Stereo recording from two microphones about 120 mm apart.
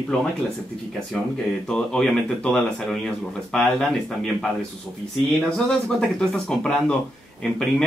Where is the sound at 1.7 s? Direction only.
5° left (ahead or behind).